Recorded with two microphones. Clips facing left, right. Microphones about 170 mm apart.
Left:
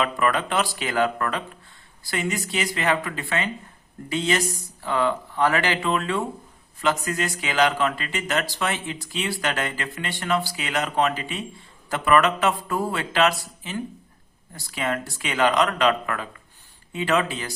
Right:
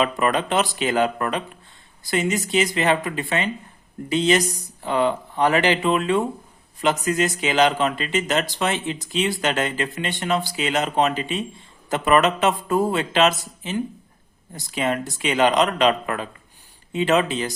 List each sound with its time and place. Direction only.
0.0 s speech: 20° right (ahead or behind)